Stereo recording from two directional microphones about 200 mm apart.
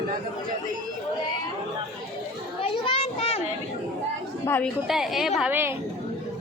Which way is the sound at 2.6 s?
30° left (ahead or behind).